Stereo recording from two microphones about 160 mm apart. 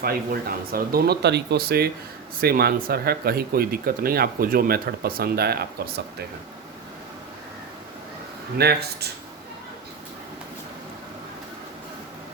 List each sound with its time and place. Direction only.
0.0 s speech: 70° right (ahead or behind)
8.5 s speech: 90° right